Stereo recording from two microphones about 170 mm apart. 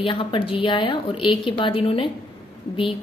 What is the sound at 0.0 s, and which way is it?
A woman's voice, 30° left (ahead or behind).